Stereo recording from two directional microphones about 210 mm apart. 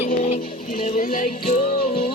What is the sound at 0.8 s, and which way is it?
Music, 40° left (ahead or behind).